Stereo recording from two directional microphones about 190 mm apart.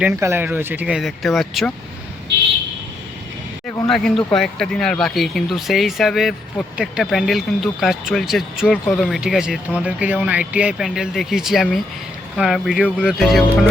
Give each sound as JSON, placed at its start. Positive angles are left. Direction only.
{"t": 0.0, "sound": "speech", "side_deg": -15}
{"t": 3.8, "sound": "speech", "side_deg": 0}